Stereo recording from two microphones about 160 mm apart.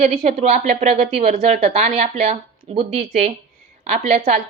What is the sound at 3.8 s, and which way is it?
Speech, 40° right (ahead or behind).